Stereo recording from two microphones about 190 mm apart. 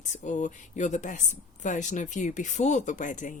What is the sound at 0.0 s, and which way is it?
Speech, 40° left (ahead or behind).